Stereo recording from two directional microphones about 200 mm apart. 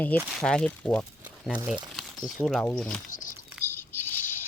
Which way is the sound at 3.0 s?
40° left (ahead or behind).